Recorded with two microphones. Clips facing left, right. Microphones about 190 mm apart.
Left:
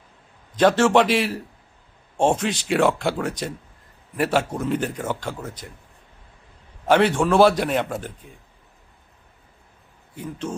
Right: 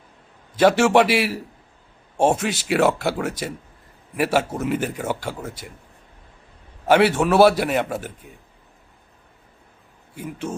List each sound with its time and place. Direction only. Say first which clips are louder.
0.5 s speech: right 1 dB; 10° right (ahead or behind)
6.8 s speech: right 1 dB; 5° right (ahead or behind)
10.2 s speech: even; 10° right (ahead or behind)